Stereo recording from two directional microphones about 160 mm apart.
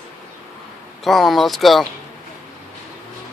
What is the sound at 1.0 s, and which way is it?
Speech, centre (ahead or behind).